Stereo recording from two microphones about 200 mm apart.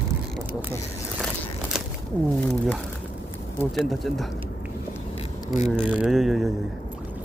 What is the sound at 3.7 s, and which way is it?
Mechanisms, centre (ahead or behind).